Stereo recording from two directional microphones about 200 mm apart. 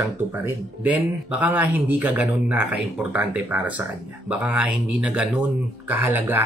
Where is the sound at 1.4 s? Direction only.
10° right (ahead or behind).